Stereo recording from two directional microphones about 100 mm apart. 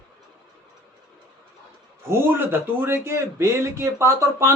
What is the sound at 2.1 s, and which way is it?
A man's voice, 25° right (ahead or behind).